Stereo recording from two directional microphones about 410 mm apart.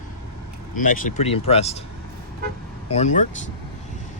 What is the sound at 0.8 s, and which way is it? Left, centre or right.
Speech, centre.